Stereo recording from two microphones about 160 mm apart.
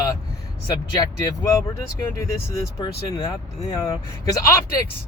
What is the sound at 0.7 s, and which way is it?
Speech, 20° left (ahead or behind).